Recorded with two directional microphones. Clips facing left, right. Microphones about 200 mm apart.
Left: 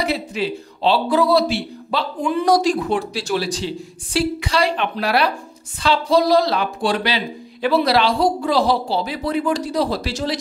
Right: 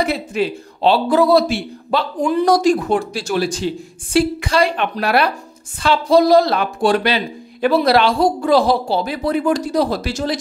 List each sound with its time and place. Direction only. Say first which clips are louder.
0.0 s speech: right 3 dB; 50° right (ahead or behind)